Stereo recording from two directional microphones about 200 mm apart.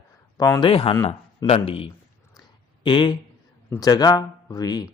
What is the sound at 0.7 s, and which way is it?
Speech, 25° left (ahead or behind).